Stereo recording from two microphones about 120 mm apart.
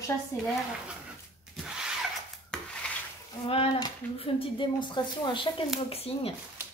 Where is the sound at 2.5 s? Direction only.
10° left (ahead or behind).